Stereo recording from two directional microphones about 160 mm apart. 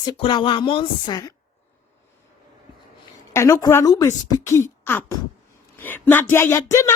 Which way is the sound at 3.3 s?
20° left (ahead or behind).